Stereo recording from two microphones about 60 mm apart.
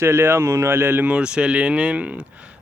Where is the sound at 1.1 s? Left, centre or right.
Centre.